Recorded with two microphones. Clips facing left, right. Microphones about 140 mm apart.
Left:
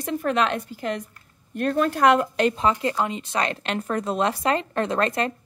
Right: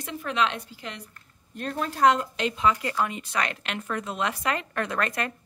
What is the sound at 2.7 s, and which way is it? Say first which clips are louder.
A woman's voice: left 3 dB; 25° left (ahead or behind).